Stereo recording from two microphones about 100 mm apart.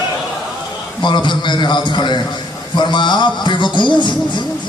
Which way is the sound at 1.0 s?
50° left (ahead or behind).